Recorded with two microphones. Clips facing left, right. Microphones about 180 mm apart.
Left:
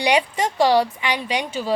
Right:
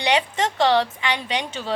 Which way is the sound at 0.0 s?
10° left (ahead or behind).